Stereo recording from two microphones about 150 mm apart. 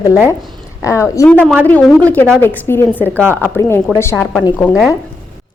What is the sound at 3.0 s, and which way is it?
Speech, 10° right (ahead or behind).